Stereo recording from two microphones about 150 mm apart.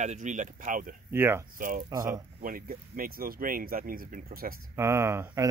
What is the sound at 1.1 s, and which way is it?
Speech, 15° right (ahead or behind).